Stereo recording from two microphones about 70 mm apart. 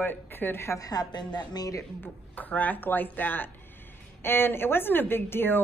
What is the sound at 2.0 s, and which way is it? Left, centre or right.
A woman's voice, left.